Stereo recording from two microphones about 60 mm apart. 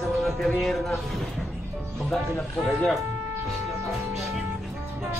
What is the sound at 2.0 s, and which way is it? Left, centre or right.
Speech, centre.